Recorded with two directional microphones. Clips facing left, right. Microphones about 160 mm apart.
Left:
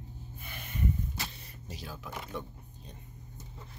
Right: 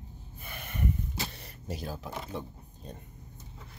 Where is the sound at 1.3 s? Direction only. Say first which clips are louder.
Right 7 dB; 70° right (ahead or behind).